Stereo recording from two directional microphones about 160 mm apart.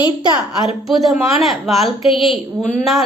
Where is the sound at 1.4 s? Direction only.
Centre (ahead or behind).